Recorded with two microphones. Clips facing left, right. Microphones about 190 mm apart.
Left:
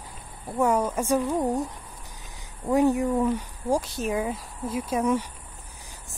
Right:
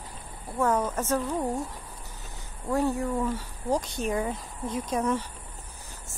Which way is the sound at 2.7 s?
20° left (ahead or behind).